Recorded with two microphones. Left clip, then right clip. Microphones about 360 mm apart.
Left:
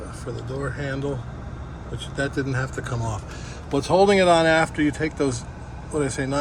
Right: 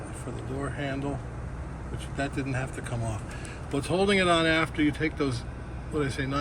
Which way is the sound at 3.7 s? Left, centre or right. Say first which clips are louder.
Left 8 dB; centre.